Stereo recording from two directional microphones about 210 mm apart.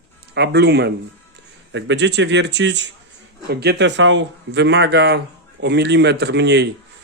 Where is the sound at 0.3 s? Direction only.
55° right (ahead or behind).